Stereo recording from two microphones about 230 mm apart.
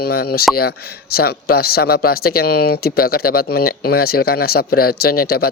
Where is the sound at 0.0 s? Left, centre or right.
Left.